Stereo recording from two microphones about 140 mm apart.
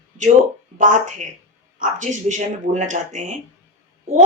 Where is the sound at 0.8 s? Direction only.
65° right (ahead or behind).